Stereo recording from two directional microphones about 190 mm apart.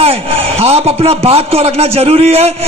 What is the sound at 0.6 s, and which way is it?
A man's voice, 30° right (ahead or behind).